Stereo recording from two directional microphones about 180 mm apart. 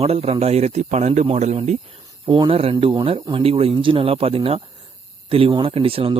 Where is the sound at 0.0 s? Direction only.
35° right (ahead or behind).